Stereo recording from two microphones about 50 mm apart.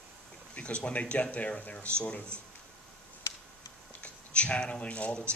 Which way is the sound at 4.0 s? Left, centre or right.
Left.